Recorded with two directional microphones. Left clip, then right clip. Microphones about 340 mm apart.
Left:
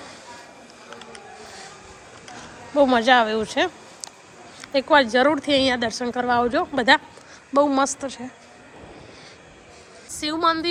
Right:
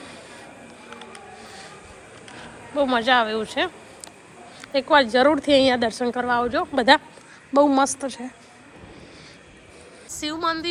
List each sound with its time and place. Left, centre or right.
0.9 s a sound: centre
4.6 s a woman's voice: centre
10.1 s a woman's voice: centre